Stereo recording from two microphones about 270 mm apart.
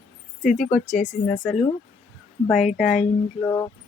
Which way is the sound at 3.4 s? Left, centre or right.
Centre.